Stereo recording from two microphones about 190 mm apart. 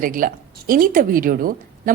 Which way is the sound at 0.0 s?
45° right (ahead or behind).